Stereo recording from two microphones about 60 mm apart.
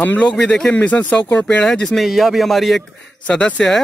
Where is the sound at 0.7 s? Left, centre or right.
Left.